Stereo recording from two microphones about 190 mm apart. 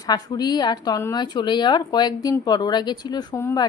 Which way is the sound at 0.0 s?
20° left (ahead or behind).